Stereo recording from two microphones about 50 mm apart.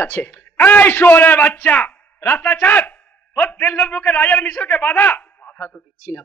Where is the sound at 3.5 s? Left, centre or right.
Left.